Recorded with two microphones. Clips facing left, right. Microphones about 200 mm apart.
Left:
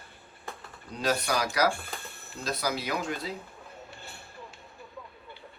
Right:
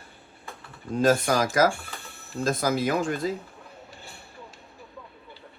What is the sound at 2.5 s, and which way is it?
Speech, 50° right (ahead or behind).